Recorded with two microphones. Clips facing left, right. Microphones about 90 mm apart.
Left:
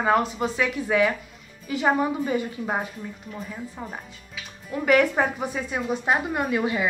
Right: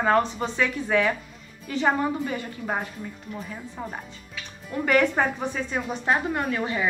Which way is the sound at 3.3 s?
Centre (ahead or behind).